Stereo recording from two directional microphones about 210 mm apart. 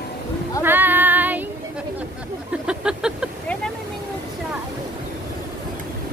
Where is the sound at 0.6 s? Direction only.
10° right (ahead or behind).